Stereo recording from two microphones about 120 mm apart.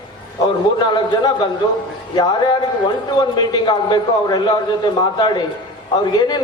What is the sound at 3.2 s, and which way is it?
A man's voice, 35° left (ahead or behind).